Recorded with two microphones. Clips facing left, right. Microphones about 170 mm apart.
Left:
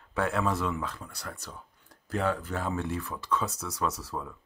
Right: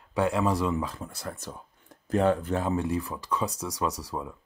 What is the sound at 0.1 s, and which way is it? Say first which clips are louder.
Speech: right 3 dB; 15° right (ahead or behind).